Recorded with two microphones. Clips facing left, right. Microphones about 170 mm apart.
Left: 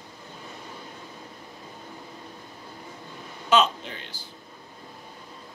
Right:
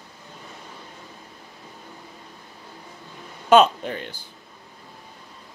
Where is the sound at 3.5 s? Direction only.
55° right (ahead or behind).